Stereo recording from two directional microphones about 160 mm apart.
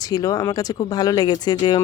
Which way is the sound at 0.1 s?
20° left (ahead or behind).